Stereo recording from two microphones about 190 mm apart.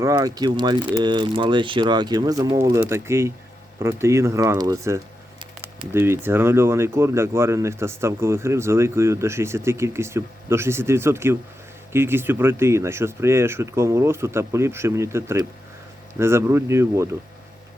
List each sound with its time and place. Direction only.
0.0 s speech: 20° right (ahead or behind)